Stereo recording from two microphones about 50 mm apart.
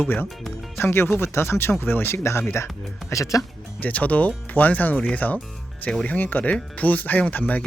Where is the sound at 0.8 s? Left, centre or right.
Left.